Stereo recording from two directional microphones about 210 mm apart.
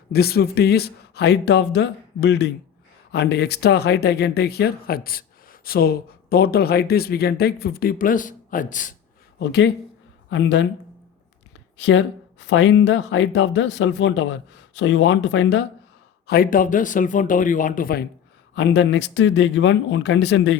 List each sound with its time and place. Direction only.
0.1 s speech: 50° left (ahead or behind)
9.4 s speech: 55° left (ahead or behind)
11.8 s speech: 60° left (ahead or behind)
16.2 s speech: 45° left (ahead or behind)
18.5 s speech: 55° left (ahead or behind)